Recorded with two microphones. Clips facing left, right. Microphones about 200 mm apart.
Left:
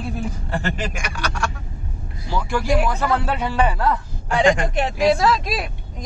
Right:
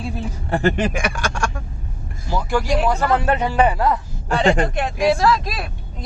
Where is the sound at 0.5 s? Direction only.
55° right (ahead or behind).